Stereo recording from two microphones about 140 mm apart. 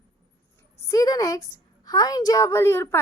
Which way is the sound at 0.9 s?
25° left (ahead or behind).